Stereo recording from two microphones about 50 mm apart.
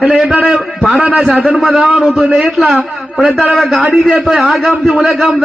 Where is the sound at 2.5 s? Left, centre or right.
Centre.